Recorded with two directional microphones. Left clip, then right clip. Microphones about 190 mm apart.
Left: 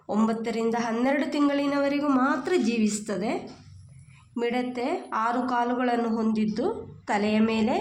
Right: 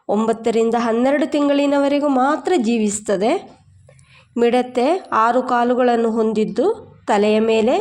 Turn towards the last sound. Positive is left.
turn(degrees=-40)  # may be behind; listen again after turning